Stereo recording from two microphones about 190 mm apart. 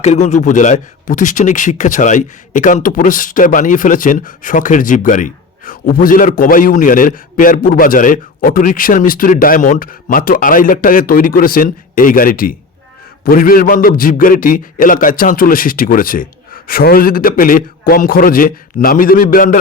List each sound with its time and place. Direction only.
0.0 s speech: 35° left (ahead or behind)